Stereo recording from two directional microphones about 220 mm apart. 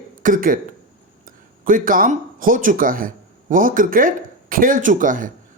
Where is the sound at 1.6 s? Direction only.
40° right (ahead or behind).